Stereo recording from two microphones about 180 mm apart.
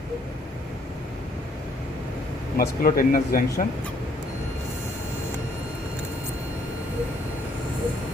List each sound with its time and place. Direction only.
2.6 s speech: 55° left (ahead or behind)